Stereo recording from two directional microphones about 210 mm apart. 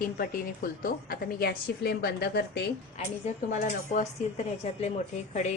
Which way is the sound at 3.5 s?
35° left (ahead or behind).